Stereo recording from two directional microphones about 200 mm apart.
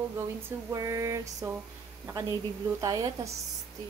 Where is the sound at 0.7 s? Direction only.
15° right (ahead or behind).